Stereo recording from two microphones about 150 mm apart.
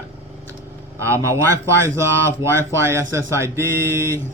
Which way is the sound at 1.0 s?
20° right (ahead or behind).